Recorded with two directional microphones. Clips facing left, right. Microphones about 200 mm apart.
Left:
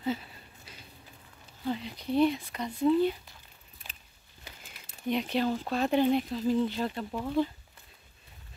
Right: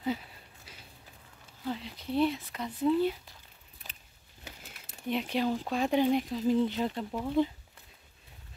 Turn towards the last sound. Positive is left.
turn(degrees=-10)  # may be behind; listen again after turning